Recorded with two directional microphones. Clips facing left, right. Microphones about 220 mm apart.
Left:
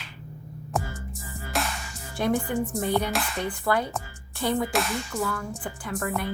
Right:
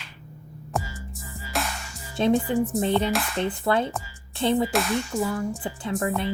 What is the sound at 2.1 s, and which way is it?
Speech, 25° right (ahead or behind).